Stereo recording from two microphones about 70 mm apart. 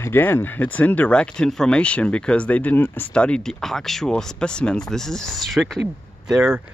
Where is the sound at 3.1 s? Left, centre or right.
Centre.